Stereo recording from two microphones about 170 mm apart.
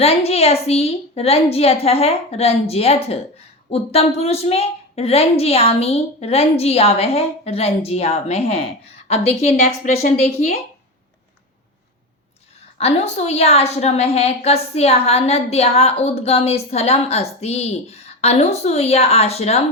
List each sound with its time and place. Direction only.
0.0 s a woman's voice: 35° left (ahead or behind)
12.8 s a woman's voice: 40° left (ahead or behind)